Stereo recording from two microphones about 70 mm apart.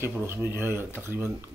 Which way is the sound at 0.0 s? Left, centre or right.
Right.